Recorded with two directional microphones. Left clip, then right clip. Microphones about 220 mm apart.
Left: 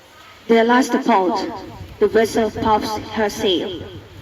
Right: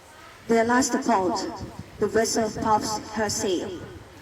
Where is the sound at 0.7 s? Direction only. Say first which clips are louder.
Left 6 dB; 50° left (ahead or behind).